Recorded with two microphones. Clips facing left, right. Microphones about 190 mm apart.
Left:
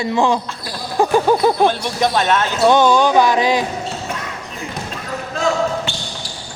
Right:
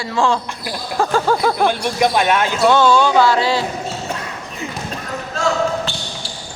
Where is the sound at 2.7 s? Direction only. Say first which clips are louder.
Left 1 dB; 15° left (ahead or behind).